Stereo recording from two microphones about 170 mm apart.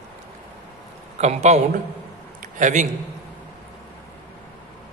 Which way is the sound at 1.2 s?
40° right (ahead or behind).